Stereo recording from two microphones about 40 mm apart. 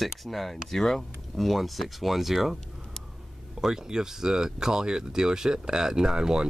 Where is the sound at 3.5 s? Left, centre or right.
Centre.